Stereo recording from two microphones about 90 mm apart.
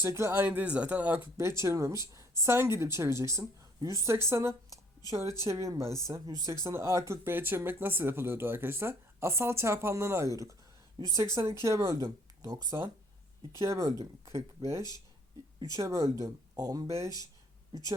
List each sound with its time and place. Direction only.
0.0 s speech: 30° right (ahead or behind)
0.4 s a man's voice: 15° right (ahead or behind)
1.4 s speech: 35° right (ahead or behind)
11.6 s speech: 35° right (ahead or behind)